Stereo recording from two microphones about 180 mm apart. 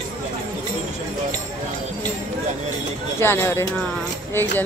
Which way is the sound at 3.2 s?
15° left (ahead or behind).